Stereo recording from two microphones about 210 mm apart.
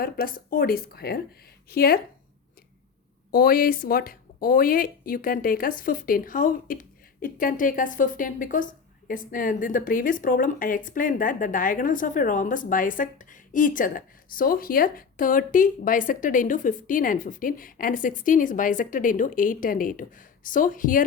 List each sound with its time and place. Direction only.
0.0 s speech: 45° left (ahead or behind)
3.3 s a woman's voice: 45° left (ahead or behind)